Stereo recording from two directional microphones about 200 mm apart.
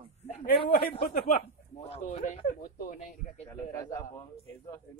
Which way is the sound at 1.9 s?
40° left (ahead or behind).